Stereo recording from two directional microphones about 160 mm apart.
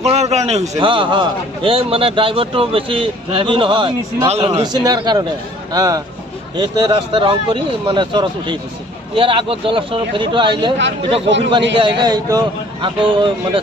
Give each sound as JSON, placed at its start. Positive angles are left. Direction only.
{"t": 0.0, "sound": "a man's voice", "side_deg": -45}
{"t": 0.7, "sound": "speech", "side_deg": -30}